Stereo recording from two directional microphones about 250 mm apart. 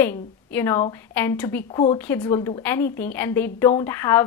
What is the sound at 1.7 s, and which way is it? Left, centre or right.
Speech, left.